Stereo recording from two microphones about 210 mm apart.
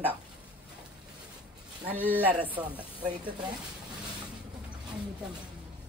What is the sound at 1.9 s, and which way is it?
Speech, 10° right (ahead or behind).